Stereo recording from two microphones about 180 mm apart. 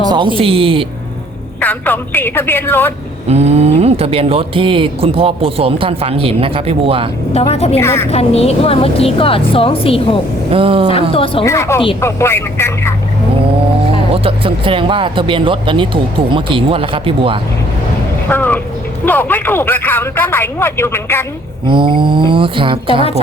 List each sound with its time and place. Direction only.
0.3 s speech: 30° right (ahead or behind)
1.6 s speech: 10° left (ahead or behind)
3.2 s speech: 35° right (ahead or behind)
7.3 s a woman's voice: 35° left (ahead or behind)
7.8 s speech: 15° left (ahead or behind)
8.1 s a woman's voice: 35° left (ahead or behind)
10.5 s speech: 30° right (ahead or behind)
11.1 s a woman's voice: 30° left (ahead or behind)
11.4 s speech: 15° left (ahead or behind)
14.1 s speech: 30° right (ahead or behind)
18.3 s speech: 10° left (ahead or behind)
21.7 s speech: 25° right (ahead or behind)